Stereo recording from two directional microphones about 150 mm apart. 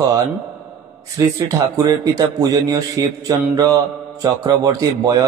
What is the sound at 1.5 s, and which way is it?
A man's voice, 25° right (ahead or behind).